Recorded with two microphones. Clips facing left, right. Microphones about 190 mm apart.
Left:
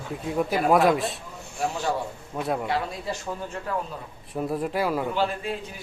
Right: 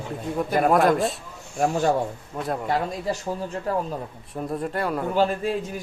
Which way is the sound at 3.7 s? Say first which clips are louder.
Right 4 dB; 40° right (ahead or behind).